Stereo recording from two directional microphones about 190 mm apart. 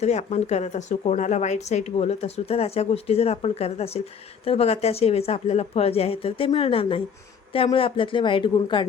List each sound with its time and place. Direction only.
0.0 s a woman's voice: 35° left (ahead or behind)